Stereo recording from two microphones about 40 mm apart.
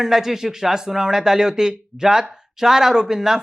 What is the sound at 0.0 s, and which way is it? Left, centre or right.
Speech, centre.